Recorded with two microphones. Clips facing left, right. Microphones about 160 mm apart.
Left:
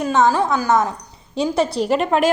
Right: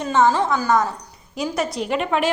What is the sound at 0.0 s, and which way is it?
A woman's voice, 15° left (ahead or behind).